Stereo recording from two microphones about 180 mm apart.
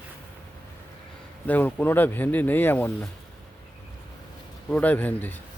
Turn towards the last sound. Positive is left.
turn(degrees=10)  # may be behind; listen again after turning